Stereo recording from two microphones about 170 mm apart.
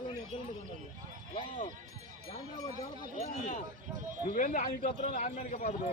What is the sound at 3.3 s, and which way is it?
Speech, 45° left (ahead or behind).